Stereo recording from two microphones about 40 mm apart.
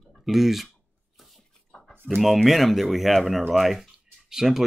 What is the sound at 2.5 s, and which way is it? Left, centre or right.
Speech, centre.